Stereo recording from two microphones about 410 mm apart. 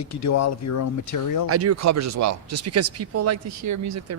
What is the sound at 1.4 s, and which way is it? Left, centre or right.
Speech, right.